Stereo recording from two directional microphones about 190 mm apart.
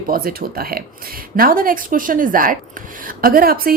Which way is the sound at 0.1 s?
50° right (ahead or behind).